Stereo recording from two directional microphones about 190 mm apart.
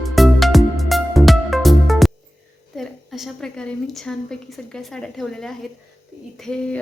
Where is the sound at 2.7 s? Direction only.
Centre (ahead or behind).